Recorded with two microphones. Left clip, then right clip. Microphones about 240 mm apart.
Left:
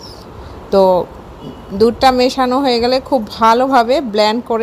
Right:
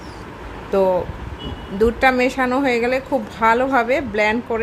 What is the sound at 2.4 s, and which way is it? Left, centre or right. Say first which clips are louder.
A woman's voice: left 5 dB; centre.